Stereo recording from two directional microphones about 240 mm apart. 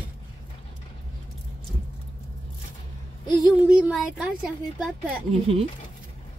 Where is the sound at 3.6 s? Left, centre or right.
Centre.